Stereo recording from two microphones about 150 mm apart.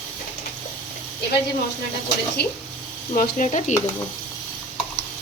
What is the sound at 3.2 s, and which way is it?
Speech, 55° left (ahead or behind).